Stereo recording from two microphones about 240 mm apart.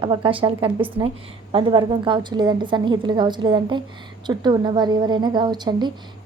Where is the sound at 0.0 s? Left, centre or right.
Right.